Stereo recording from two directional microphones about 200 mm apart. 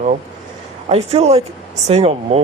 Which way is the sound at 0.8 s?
30° right (ahead or behind).